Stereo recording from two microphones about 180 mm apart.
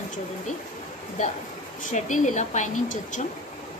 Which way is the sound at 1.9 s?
45° left (ahead or behind).